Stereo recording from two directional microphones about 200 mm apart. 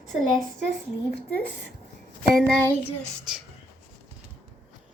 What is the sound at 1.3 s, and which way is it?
Speech, 60° right (ahead or behind).